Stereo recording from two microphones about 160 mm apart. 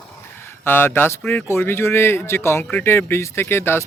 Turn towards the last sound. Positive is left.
turn(degrees=15)  # may be behind; listen again after turning